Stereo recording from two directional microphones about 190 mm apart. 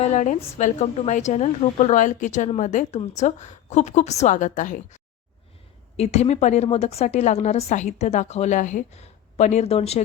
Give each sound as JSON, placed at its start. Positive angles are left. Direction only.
{"t": 0.0, "sound": "a woman's voice", "side_deg": 40}
{"t": 6.0, "sound": "a woman's voice", "side_deg": 35}